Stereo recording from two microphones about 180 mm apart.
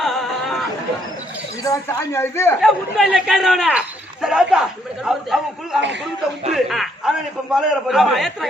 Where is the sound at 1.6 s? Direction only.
15° left (ahead or behind).